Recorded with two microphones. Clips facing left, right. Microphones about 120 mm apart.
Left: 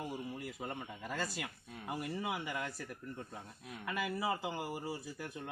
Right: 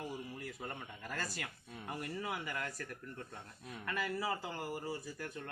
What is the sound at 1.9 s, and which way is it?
Speech, 10° left (ahead or behind).